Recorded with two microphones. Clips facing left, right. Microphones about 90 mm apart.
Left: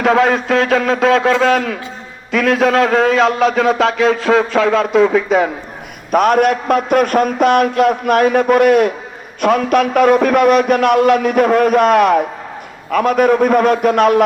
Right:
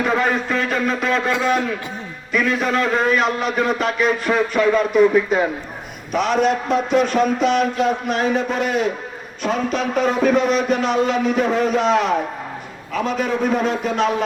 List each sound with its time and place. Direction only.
0.0 s a man's voice: 90° left
6.1 s a man's voice: 50° left (ahead or behind)